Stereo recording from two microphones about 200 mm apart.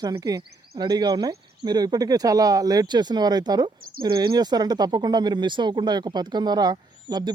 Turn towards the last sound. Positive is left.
turn(degrees=-20)  # may be behind; listen again after turning